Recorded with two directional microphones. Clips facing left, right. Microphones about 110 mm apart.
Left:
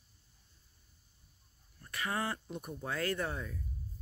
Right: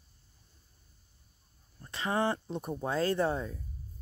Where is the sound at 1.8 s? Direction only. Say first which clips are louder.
Right 6 dB; 25° right (ahead or behind).